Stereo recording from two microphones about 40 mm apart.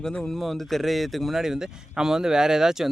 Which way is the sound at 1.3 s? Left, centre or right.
Centre.